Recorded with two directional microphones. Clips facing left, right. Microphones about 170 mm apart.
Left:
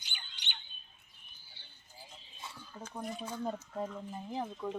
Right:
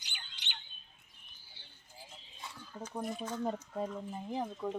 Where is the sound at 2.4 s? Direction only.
5° right (ahead or behind).